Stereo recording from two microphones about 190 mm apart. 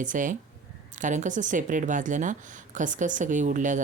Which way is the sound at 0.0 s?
40° right (ahead or behind).